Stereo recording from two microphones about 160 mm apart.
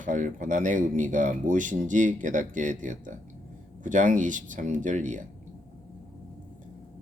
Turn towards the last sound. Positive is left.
turn(degrees=-50)  # may be behind; listen again after turning